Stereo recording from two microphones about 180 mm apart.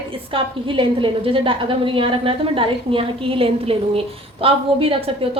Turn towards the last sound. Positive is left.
turn(degrees=-30)  # may be behind; listen again after turning